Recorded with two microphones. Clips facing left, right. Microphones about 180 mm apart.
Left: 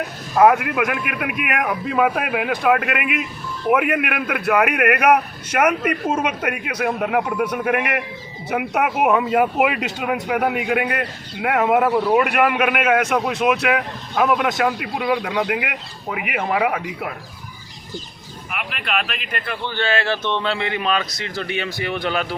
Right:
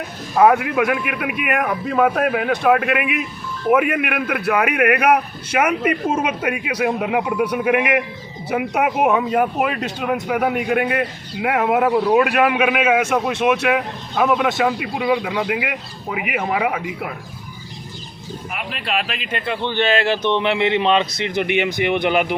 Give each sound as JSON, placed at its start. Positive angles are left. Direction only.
{"t": 0.3, "sound": "a man's voice", "side_deg": 0}
{"t": 18.5, "sound": "speech", "side_deg": -30}